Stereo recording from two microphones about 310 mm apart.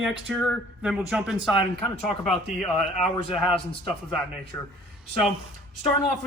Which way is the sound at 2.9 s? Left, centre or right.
Centre.